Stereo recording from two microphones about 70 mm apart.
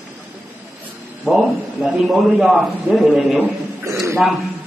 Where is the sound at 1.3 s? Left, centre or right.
Centre.